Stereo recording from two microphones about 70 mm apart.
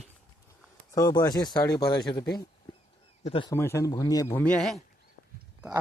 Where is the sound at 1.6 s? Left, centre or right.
Left.